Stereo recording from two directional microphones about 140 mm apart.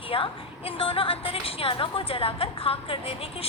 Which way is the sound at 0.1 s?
40° left (ahead or behind).